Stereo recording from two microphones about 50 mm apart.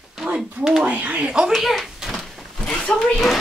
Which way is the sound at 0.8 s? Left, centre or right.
Right.